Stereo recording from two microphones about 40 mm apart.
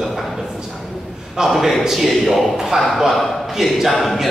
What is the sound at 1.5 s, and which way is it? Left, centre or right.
A man's voice, centre.